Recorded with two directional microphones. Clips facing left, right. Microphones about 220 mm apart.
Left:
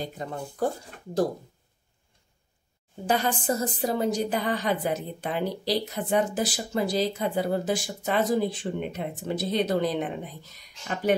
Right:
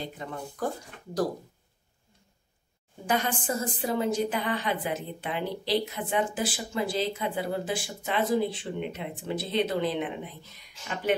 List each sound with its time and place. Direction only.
0.0 s a woman's voice: 35° left (ahead or behind)
3.1 s a woman's voice: 35° left (ahead or behind)